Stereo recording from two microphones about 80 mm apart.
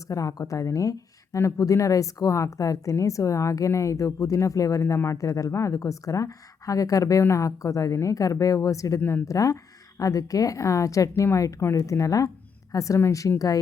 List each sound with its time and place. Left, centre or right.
0.1 s speech: left
9.0 s a woman's voice: left
9.2 s speech: left